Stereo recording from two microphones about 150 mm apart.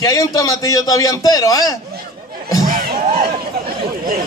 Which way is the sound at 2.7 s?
60° right (ahead or behind).